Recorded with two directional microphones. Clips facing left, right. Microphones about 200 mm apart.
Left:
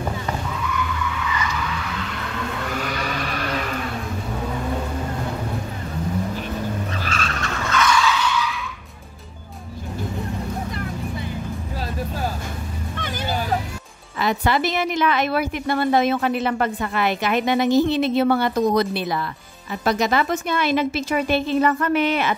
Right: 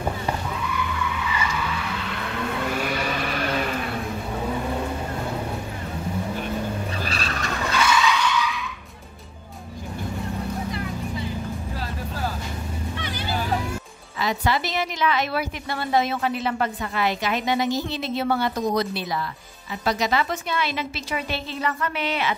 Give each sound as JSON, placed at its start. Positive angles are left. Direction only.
{"t": 7.1, "sound": "vehicle", "side_deg": -35}
{"t": 7.4, "sound": "vehicle", "side_deg": -15}
{"t": 7.8, "sound": "skidding", "side_deg": -5}
{"t": 14.2, "sound": "a woman's voice", "side_deg": 55}